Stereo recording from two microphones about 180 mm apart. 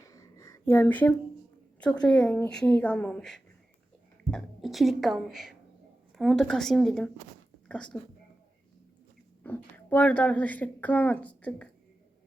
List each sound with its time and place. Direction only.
0.0 s a sound: 20° left (ahead or behind)
1.8 s a woman's voice: 5° left (ahead or behind)
9.4 s a woman's voice: 10° left (ahead or behind)